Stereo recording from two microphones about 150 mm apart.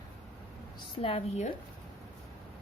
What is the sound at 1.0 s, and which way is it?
Speech, 40° left (ahead or behind).